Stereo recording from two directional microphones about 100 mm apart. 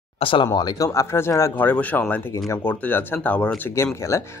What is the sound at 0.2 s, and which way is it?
Speech, 60° left (ahead or behind).